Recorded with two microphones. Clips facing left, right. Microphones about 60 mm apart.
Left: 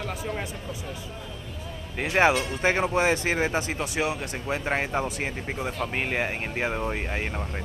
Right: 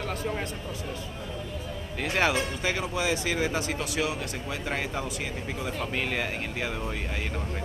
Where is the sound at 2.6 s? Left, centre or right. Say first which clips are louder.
Left 9 dB; left.